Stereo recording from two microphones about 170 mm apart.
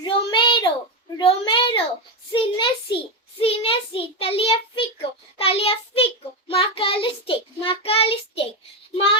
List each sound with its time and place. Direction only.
0.0 s child singing: 30° left (ahead or behind)
2.3 s a sound: 30° left (ahead or behind)
3.4 s child singing: 35° left (ahead or behind)